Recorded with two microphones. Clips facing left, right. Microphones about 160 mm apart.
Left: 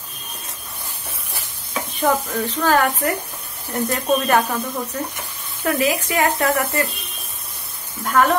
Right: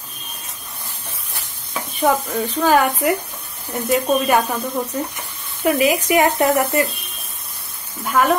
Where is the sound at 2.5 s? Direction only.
15° right (ahead or behind).